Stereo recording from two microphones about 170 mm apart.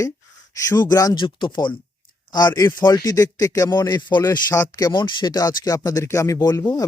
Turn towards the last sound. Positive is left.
turn(degrees=20)  # may be behind; listen again after turning